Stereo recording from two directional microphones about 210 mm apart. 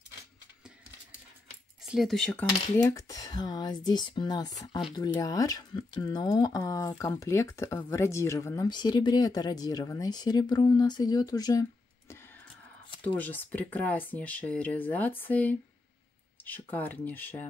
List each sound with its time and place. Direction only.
1.9 s speech: centre (ahead or behind)
2.6 s speech: 15° left (ahead or behind)
13.0 s speech: 5° left (ahead or behind)